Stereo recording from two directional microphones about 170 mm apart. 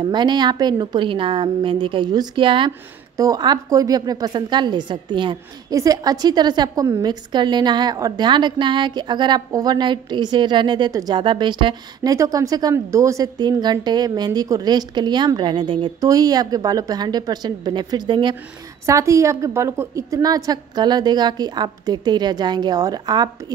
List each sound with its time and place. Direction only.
0.0 s a woman's voice: 25° right (ahead or behind)
18.9 s a woman's voice: 15° right (ahead or behind)